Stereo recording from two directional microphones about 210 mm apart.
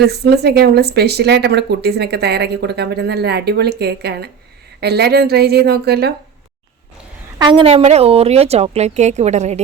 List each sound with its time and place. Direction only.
0.1 s speech: 50° right (ahead or behind)
7.3 s speech: 20° right (ahead or behind)